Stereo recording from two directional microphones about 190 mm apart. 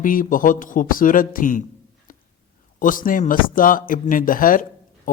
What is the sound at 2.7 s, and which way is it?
Speech, 45° left (ahead or behind).